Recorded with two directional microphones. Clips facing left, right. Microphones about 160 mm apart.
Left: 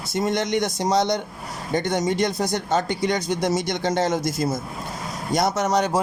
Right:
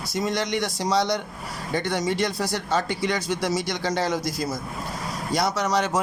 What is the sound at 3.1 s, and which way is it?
Speech, 20° left (ahead or behind).